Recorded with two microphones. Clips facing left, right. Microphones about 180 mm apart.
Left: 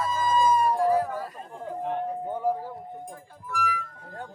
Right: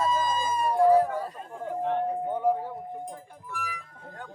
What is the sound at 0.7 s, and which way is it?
Music, 30° right (ahead or behind).